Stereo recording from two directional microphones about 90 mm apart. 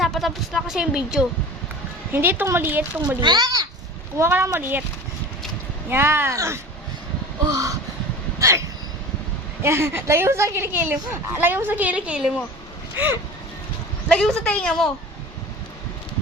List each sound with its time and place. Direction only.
0.0 s speech: centre (ahead or behind)
2.1 s a woman's voice: 25° right (ahead or behind)
3.2 s speech: 55° right (ahead or behind)
4.2 s a woman's voice: 30° right (ahead or behind)
5.9 s a woman's voice: 25° right (ahead or behind)
7.4 s speech: 40° right (ahead or behind)
9.6 s a woman's voice: 25° right (ahead or behind); by 12.3 s 10° right (ahead or behind)
14.1 s speech: 5° left (ahead or behind)